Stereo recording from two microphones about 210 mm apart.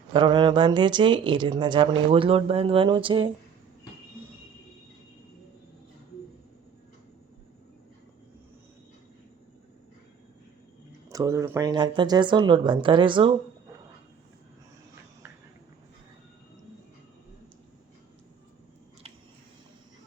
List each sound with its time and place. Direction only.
0.1 s speech: 20° right (ahead or behind)
11.1 s speech: 15° right (ahead or behind)